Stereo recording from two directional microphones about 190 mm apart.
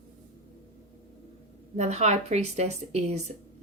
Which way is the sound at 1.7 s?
35° right (ahead or behind).